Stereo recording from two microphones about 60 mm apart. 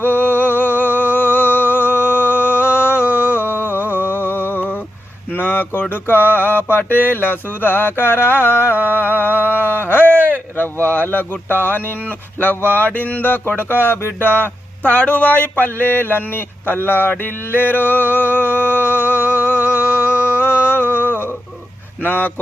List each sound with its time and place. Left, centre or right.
0.0 s a sound: left
5.3 s mantra: left
9.9 s a sound: left
10.6 s mantra: left
12.7 s music: left
13.5 s speech: left
20.1 s humming: left
22.0 s music: left